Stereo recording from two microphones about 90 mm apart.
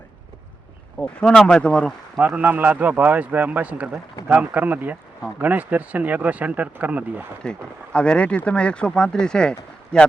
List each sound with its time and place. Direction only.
0.9 s speech: 10° left (ahead or behind)
2.2 s speech: 20° right (ahead or behind)
7.9 s speech: 10° left (ahead or behind)